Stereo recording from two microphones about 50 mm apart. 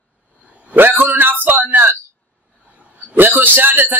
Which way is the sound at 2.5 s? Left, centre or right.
Right.